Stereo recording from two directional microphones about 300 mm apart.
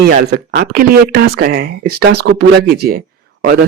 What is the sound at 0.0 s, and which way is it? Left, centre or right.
Speech, right.